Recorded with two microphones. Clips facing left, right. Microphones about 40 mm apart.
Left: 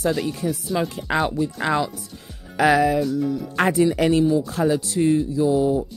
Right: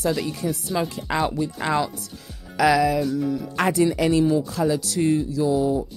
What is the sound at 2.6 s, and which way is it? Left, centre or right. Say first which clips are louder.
Music: left 1 dB; left.